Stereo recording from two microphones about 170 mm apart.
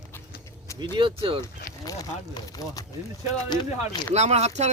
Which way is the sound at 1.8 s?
20° left (ahead or behind).